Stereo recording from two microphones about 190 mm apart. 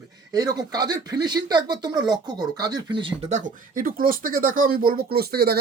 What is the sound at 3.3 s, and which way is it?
Speech, 45° right (ahead or behind).